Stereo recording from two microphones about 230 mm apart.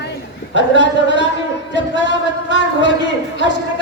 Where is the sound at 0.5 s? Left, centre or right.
Left.